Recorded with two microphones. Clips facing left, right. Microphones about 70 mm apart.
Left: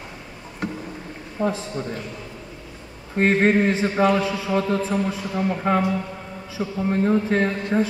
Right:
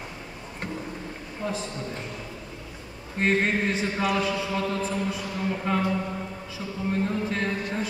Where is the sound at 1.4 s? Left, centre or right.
Left.